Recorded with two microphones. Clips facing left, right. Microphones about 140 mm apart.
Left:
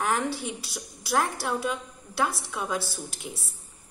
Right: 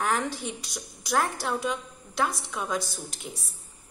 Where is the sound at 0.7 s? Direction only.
5° left (ahead or behind).